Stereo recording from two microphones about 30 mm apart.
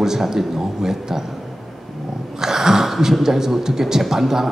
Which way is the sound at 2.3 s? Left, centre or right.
Centre.